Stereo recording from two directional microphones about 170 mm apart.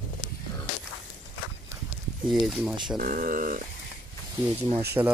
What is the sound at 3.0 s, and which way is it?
Speech, 55° right (ahead or behind).